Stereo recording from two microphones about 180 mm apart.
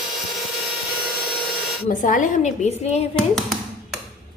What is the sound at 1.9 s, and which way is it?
A woman's voice, 45° left (ahead or behind).